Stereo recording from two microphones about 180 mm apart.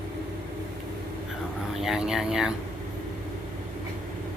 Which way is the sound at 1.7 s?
Centre (ahead or behind).